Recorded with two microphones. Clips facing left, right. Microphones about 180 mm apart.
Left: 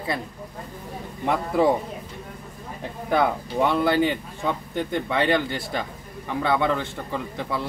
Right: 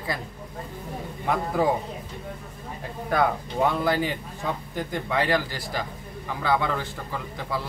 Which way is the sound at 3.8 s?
25° left (ahead or behind).